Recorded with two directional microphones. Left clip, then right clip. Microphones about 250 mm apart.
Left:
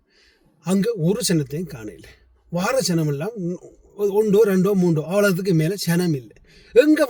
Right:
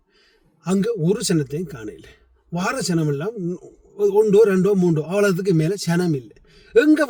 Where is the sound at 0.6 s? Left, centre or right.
Centre.